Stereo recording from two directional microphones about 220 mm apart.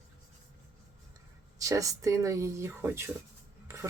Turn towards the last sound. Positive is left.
turn(degrees=-10)  # may be behind; listen again after turning